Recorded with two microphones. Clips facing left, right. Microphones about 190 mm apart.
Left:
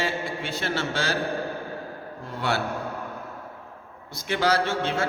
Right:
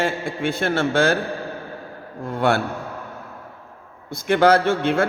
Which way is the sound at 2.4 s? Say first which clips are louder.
Right 7 dB; 50° right (ahead or behind).